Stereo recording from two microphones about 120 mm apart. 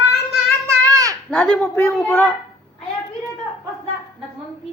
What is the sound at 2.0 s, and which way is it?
Speech, 20° left (ahead or behind).